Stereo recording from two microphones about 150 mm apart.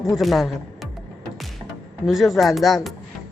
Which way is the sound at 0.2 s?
Centre (ahead or behind).